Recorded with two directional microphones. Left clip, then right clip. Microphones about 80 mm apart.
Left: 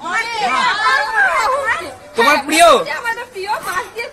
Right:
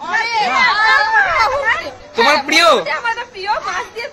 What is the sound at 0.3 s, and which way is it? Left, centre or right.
Chatter, right.